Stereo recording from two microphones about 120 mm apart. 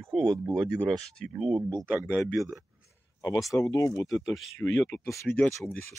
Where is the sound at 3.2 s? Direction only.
30° left (ahead or behind).